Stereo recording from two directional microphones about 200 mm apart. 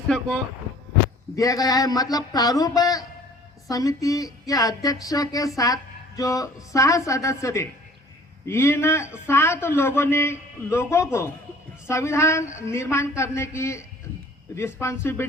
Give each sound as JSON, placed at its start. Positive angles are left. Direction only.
{"t": 1.4, "sound": "speech", "side_deg": 15}